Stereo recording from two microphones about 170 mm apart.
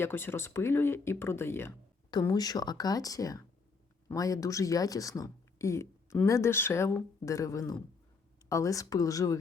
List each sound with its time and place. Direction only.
0.0 s speech: 15° left (ahead or behind)